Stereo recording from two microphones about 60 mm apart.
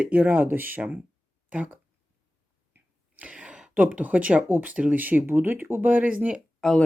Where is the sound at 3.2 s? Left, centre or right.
Centre.